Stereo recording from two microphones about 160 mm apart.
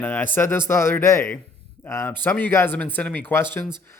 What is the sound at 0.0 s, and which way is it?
Speech, 15° left (ahead or behind).